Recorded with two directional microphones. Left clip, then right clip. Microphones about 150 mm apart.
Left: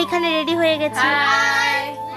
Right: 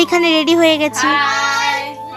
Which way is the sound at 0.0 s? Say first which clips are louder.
Right 6 dB; 25° right (ahead or behind).